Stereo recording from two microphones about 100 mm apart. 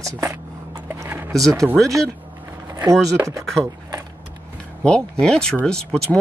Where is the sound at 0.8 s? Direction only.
25° right (ahead or behind).